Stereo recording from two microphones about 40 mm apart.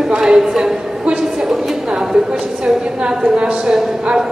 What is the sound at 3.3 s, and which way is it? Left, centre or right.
Speech, right.